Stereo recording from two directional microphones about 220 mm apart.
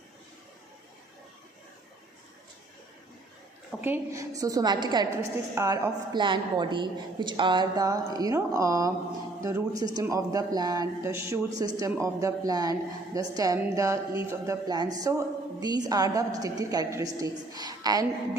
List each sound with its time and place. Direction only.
3.8 s a woman's voice: 10° right (ahead or behind)